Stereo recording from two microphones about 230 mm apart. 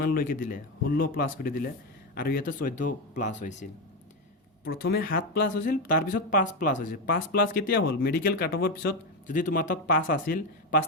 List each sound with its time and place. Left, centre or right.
0.0 s speech: left
4.6 s speech: left